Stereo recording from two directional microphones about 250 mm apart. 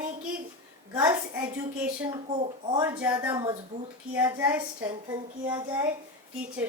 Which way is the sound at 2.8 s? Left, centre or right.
Centre.